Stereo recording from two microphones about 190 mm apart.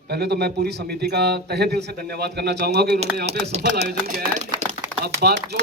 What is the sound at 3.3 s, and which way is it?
Chopping, 35° right (ahead or behind).